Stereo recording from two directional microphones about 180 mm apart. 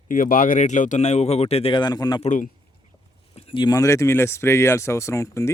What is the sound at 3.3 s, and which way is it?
Speech, 30° left (ahead or behind).